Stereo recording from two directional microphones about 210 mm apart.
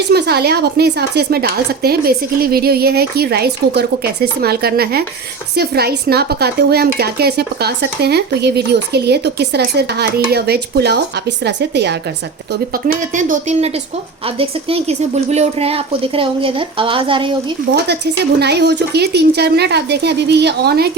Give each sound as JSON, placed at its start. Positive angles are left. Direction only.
{"t": 0.1, "sound": "speech", "side_deg": -50}
{"t": 12.7, "sound": "a woman's voice", "side_deg": -40}
{"t": 17.8, "sound": "speech", "side_deg": -50}